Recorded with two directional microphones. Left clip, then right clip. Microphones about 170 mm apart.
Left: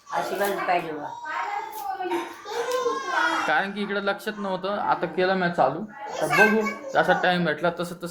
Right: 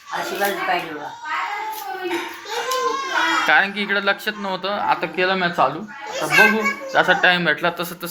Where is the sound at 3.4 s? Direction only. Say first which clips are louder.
Right 8 dB; 5° left (ahead or behind).